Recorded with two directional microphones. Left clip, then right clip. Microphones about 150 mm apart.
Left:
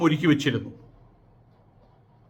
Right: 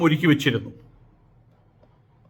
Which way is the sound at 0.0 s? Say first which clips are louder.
Right 2 dB; 15° right (ahead or behind).